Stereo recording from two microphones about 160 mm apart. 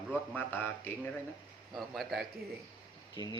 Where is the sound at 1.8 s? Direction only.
Centre (ahead or behind).